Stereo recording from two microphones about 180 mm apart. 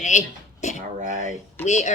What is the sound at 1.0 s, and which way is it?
Speech, 45° right (ahead or behind).